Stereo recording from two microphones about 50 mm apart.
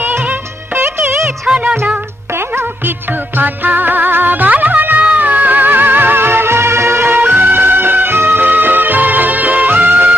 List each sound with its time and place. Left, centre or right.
0.3 s music of bollywood: right
1.5 s music: centre
2.6 s music: right